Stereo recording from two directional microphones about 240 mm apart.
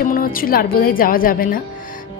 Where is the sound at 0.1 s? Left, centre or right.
Left.